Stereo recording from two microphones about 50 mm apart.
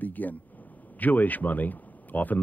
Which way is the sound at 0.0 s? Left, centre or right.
Left.